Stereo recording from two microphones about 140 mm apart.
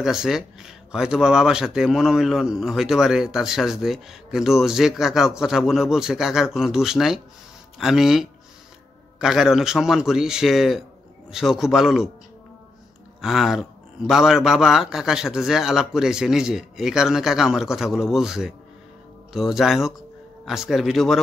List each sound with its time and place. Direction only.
0.0 s speech: 5° right (ahead or behind)
13.2 s speech: centre (ahead or behind)